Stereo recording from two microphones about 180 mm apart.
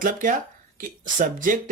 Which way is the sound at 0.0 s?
50° right (ahead or behind).